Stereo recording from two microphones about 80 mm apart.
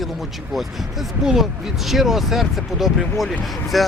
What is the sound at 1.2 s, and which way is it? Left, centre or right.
Speech, centre.